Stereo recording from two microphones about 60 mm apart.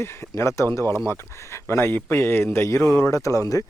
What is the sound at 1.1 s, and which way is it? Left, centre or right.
Speech, left.